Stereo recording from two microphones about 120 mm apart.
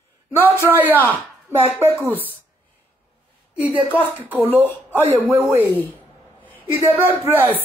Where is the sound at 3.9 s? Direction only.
15° left (ahead or behind).